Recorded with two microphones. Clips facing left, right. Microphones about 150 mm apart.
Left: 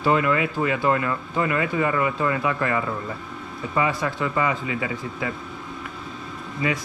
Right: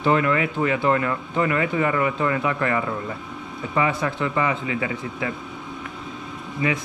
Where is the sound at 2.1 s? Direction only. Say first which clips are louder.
Right 1 dB; 5° left (ahead or behind).